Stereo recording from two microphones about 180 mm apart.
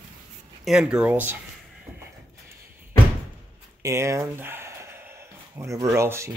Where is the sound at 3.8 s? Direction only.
15° right (ahead or behind).